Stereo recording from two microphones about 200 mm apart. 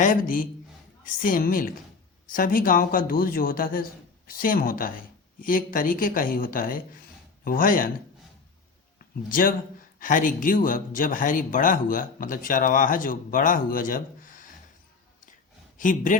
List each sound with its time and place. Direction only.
0.0 s a man's voice: 45° left (ahead or behind)
9.3 s a man's voice: 45° left (ahead or behind)
15.8 s speech: 40° left (ahead or behind)